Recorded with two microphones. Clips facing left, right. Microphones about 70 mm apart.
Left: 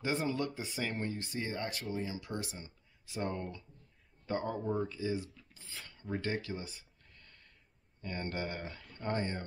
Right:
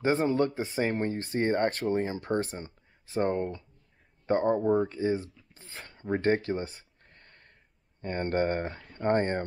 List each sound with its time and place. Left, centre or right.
0.0 s speech: right
5.5 s a sound: right
8.0 s speech: right